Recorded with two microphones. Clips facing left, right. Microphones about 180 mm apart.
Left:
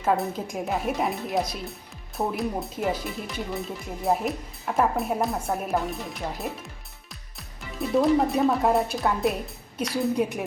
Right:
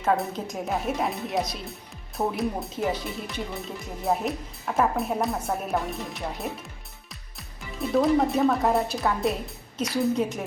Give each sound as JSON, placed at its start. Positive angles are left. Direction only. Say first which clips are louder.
{"t": 0.0, "sound": "a woman's voice", "louder": "even", "side_deg": 5}